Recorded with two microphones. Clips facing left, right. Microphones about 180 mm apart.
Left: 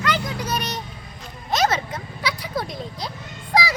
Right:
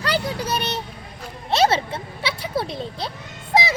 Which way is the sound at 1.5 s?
30° right (ahead or behind).